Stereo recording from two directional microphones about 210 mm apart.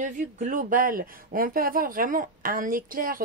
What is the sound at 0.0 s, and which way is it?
Speech, 35° right (ahead or behind).